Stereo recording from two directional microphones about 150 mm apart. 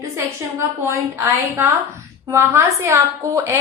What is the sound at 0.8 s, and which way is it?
A woman's voice, 20° right (ahead or behind).